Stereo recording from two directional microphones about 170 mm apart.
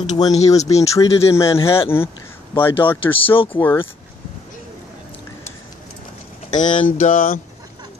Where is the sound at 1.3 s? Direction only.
15° left (ahead or behind).